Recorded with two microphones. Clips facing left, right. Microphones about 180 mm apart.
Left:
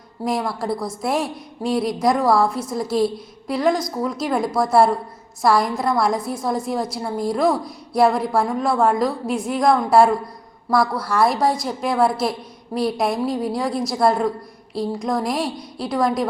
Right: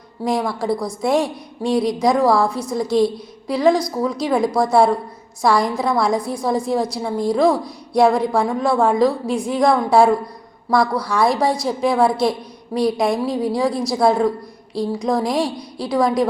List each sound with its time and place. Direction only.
0.3 s a woman's voice: 5° left (ahead or behind)